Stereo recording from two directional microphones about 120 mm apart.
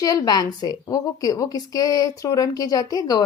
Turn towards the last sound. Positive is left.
turn(degrees=35)  # may be behind; listen again after turning